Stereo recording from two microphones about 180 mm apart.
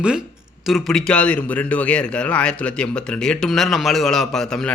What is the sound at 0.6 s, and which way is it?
A man's voice, centre (ahead or behind).